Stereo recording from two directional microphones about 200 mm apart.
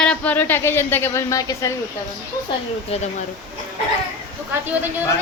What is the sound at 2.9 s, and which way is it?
Speech, 30° left (ahead or behind).